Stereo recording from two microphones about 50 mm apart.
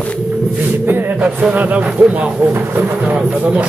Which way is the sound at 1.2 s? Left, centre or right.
Right.